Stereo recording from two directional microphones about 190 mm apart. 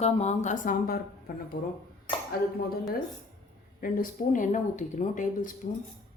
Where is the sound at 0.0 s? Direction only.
35° left (ahead or behind).